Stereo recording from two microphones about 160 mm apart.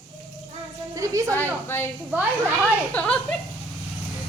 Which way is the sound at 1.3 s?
15° left (ahead or behind).